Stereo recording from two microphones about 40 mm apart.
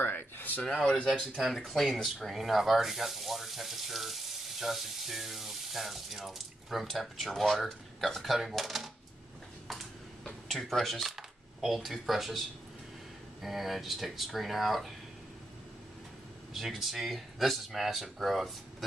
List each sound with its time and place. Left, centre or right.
0.0 s a sound: left
1.0 s speech: centre
10.5 s speech: centre
16.5 s speech: centre